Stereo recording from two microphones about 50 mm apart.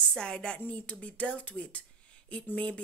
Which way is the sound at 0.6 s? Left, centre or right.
Left.